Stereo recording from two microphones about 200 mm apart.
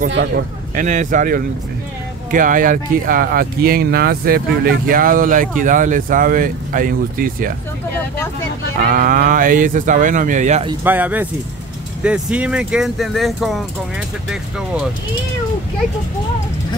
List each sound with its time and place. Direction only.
0.1 s a man's voice: 60° right (ahead or behind)
0.8 s speech: 40° right (ahead or behind)
8.9 s speech: 45° right (ahead or behind)
10.8 s speech: 10° right (ahead or behind)